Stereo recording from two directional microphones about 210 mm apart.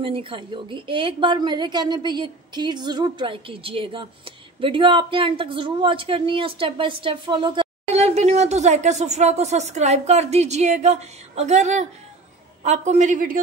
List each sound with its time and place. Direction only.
0.0 s a woman's voice: 25° right (ahead or behind)